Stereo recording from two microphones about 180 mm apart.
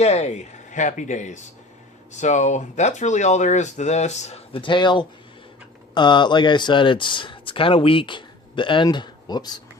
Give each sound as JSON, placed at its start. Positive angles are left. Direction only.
{"t": 0.0, "sound": "speech", "side_deg": 40}